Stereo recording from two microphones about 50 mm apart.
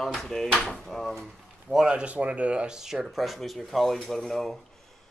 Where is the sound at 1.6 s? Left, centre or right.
Centre.